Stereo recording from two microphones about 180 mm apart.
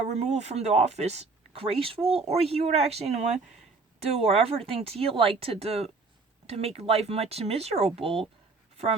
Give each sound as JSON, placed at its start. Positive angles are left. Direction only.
{"t": 0.0, "sound": "speech", "side_deg": -40}